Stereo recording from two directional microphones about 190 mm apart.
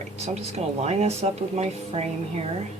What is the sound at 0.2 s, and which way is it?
Speech, 35° right (ahead or behind).